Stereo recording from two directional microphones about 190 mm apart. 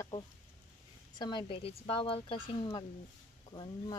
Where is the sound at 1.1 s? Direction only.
25° left (ahead or behind).